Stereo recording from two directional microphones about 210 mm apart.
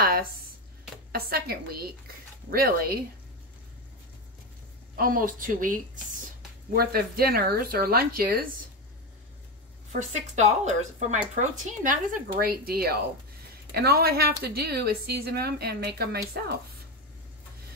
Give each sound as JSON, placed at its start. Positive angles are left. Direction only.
{"t": 1.1, "sound": "speech", "side_deg": -45}
{"t": 4.9, "sound": "a woman's voice", "side_deg": -40}
{"t": 9.9, "sound": "a woman's voice", "side_deg": -35}